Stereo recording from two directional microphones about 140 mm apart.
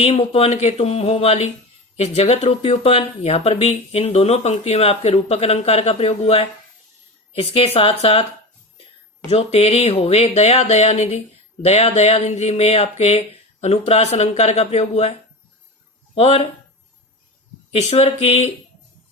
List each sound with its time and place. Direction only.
0.0 s speech: 50° left (ahead or behind)
9.2 s speech: 45° left (ahead or behind)
16.1 s speech: 45° left (ahead or behind)
17.7 s speech: 50° left (ahead or behind)